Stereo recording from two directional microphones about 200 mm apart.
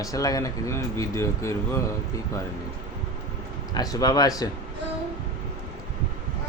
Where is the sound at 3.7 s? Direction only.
20° left (ahead or behind).